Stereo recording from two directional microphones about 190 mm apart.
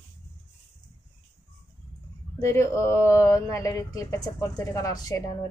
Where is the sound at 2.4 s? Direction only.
15° left (ahead or behind).